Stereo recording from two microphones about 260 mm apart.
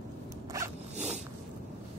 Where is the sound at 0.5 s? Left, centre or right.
Centre.